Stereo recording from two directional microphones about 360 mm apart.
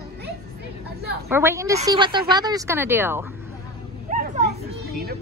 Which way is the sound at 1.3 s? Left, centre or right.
Centre.